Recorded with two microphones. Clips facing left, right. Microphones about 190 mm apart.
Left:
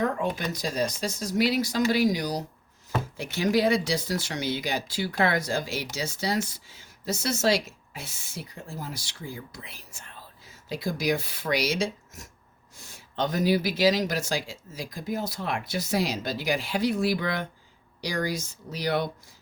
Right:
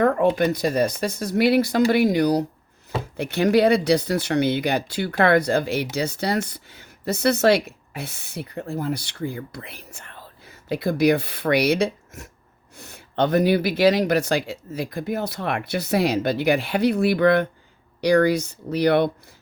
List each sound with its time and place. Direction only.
0.0 s speech: 60° right (ahead or behind)